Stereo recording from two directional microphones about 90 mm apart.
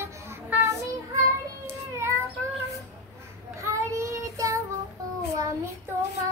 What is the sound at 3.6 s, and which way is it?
Child singing, 35° right (ahead or behind).